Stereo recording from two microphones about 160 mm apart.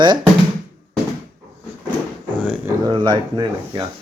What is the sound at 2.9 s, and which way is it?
Speech, 30° right (ahead or behind).